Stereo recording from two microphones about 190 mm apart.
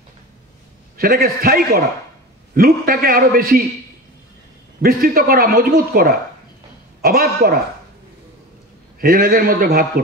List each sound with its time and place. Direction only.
0.9 s a man's voice: 50° right (ahead or behind)
4.8 s a man's voice: 50° right (ahead or behind)
9.0 s a man's voice: 50° right (ahead or behind)